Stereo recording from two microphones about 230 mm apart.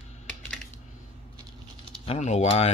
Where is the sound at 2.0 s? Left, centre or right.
Left.